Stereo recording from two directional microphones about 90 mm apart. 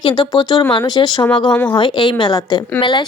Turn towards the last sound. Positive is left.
turn(degrees=55)  # may be behind; listen again after turning